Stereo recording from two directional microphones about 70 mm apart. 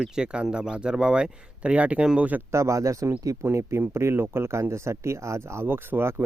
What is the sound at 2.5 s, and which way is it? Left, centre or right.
Speech, right.